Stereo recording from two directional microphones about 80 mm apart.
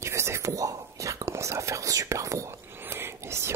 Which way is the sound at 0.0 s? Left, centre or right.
Right.